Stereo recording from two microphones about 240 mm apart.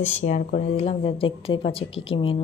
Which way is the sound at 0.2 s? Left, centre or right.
Left.